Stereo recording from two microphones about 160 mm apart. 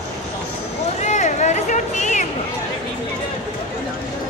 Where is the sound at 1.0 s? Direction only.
50° left (ahead or behind).